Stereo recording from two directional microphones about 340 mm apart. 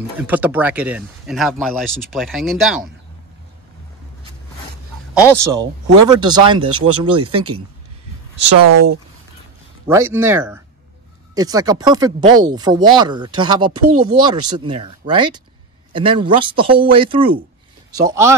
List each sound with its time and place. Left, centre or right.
0.2 s speech: centre
5.2 s speech: centre
8.7 s speech: right
9.8 s speech: centre